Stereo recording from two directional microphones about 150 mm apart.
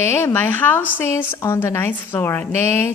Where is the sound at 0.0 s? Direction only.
20° left (ahead or behind).